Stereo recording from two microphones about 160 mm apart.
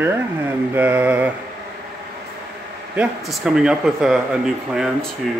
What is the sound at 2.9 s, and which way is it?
Speech, 5° right (ahead or behind).